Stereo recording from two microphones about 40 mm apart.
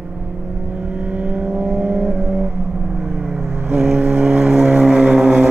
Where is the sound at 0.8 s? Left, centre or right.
Right.